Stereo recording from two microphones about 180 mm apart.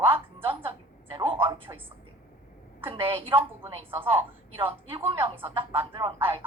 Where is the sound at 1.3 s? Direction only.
30° right (ahead or behind).